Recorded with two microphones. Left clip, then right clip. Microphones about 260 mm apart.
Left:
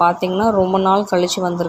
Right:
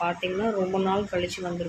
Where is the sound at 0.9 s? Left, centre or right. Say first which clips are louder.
Left 11 dB; left.